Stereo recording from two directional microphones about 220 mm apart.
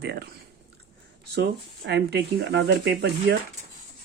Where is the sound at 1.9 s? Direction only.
50° right (ahead or behind).